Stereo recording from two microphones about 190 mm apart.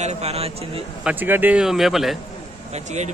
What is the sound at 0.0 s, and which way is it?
Speech, 35° right (ahead or behind).